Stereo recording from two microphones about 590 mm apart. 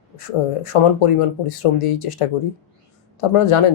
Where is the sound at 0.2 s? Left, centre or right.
Left.